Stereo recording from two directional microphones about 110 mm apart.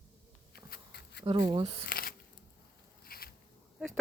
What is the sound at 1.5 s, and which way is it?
Speech, 50° right (ahead or behind).